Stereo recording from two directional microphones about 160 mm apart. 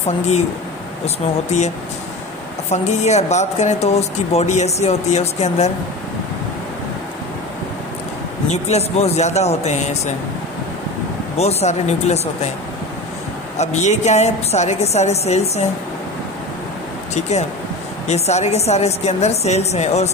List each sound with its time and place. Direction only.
1.0 s speech: 45° left (ahead or behind)
2.7 s speech: 45° left (ahead or behind)
8.5 s speech: 45° left (ahead or behind)
11.3 s speech: 45° left (ahead or behind)
13.6 s speech: 45° left (ahead or behind)
17.1 s speech: 45° left (ahead or behind)